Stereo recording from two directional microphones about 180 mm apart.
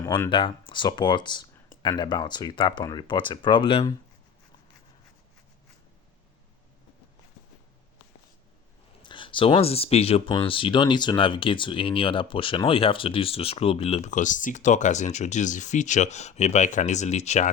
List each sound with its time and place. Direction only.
0.3 s speech: 30° left (ahead or behind)
9.0 s speech: 25° left (ahead or behind)